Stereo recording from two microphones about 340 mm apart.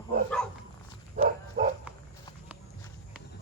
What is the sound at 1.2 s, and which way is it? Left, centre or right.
Bow-wow, right.